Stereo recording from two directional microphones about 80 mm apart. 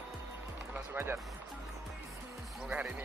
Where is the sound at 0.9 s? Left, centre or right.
Right.